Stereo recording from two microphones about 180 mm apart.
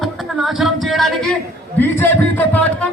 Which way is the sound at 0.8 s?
Centre (ahead or behind).